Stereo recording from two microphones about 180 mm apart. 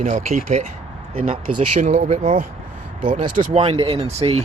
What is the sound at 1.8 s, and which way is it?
Speech, 40° right (ahead or behind).